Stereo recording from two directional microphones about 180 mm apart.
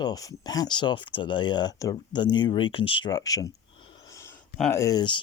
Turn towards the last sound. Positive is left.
turn(degrees=25)  # may be behind; listen again after turning